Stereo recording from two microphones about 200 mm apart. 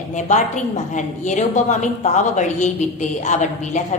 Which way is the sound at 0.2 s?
35° left (ahead or behind).